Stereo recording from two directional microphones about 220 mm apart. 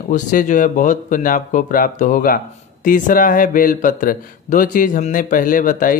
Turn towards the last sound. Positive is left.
turn(degrees=40)  # may be behind; listen again after turning